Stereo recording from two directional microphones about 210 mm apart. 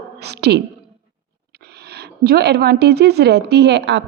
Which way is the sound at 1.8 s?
50° right (ahead or behind).